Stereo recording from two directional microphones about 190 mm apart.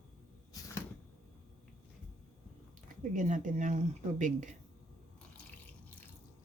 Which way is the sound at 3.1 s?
40° right (ahead or behind).